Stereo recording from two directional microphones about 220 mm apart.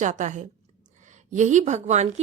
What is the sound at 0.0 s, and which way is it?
A woman's voice, 35° right (ahead or behind).